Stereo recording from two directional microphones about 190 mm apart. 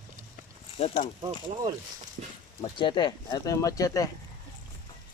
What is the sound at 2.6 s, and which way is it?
Speech, 25° left (ahead or behind).